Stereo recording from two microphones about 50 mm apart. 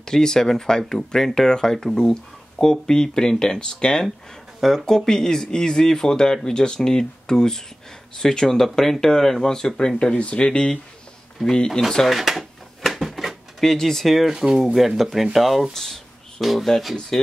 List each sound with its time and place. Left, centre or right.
0.0 s speech: centre
12.2 s drawer open or close: centre
14.3 s speech: centre